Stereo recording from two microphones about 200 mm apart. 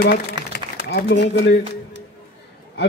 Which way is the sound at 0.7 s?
55° left (ahead or behind).